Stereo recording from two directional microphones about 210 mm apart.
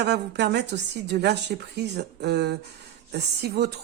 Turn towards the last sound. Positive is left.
turn(degrees=-50)  # may be behind; listen again after turning